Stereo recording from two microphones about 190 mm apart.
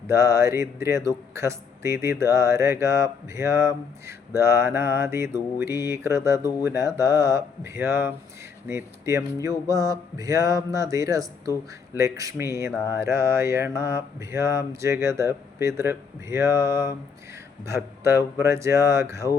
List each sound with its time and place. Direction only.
0.1 s speech: 15° right (ahead or behind)